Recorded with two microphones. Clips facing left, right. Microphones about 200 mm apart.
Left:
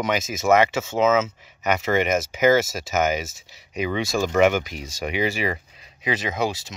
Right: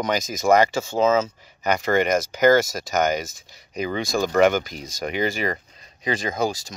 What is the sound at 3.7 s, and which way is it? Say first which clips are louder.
Speech: left 1 dB; 40° right (ahead or behind).